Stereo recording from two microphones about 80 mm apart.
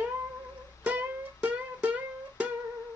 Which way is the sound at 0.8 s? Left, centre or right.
Right.